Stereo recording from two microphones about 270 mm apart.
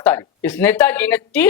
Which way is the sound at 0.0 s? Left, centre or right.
Centre.